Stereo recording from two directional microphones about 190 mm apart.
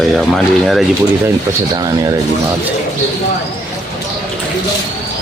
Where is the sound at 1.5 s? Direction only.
20° right (ahead or behind).